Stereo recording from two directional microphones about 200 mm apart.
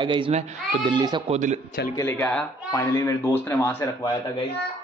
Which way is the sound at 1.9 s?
15° left (ahead or behind).